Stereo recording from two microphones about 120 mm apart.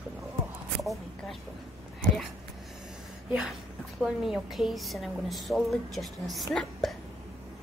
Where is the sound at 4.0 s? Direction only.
Centre (ahead or behind).